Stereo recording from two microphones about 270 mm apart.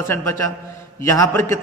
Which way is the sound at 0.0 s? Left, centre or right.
Centre.